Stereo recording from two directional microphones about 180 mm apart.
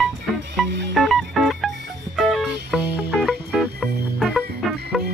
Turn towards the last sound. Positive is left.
turn(degrees=0)  # may be behind; listen again after turning